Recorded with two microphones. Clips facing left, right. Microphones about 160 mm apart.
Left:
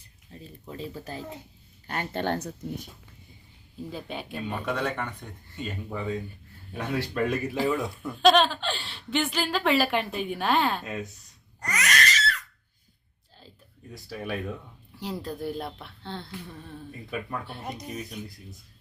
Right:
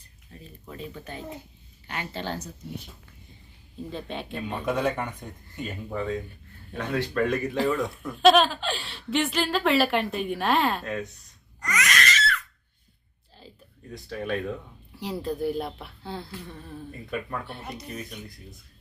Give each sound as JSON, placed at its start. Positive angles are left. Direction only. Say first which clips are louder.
{"t": 0.3, "sound": "speech", "louder": "left 2 dB", "side_deg": 30}
{"t": 1.9, "sound": "speech", "louder": "left 4 dB", "side_deg": 50}
{"t": 3.8, "sound": "speech", "louder": "right 2 dB", "side_deg": 5}
{"t": 4.6, "sound": "speech", "louder": "right 5 dB", "side_deg": -10}
{"t": 5.9, "sound": "speech", "louder": "right 3 dB", "side_deg": 0}
{"t": 11.6, "sound": "crying", "louder": "right 1 dB", "side_deg": 40}
{"t": 13.9, "sound": "speech", "louder": "right 3 dB", "side_deg": 5}